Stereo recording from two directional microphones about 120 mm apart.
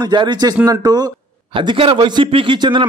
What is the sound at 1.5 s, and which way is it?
A man's voice, 50° right (ahead or behind).